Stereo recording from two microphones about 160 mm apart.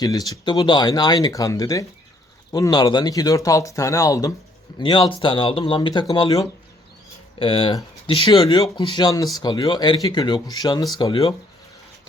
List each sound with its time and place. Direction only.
0.0 s speech: 25° left (ahead or behind)
7.3 s speech: 35° left (ahead or behind)